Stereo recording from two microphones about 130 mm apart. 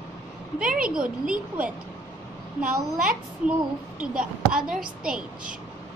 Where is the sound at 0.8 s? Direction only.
5° right (ahead or behind).